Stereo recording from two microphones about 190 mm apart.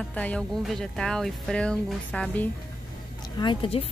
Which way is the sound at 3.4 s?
25° left (ahead or behind).